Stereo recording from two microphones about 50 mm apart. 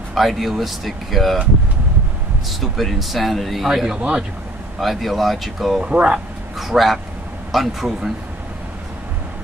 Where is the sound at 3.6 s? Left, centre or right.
Centre.